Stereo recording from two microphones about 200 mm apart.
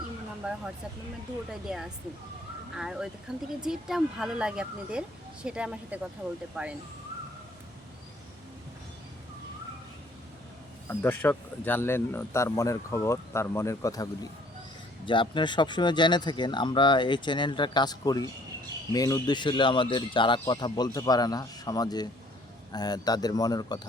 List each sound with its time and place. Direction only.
1.5 s speech: centre (ahead or behind)
10.8 s speech: 10° left (ahead or behind)